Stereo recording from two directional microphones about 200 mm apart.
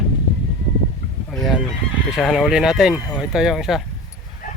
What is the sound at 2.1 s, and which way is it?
Speech, centre (ahead or behind).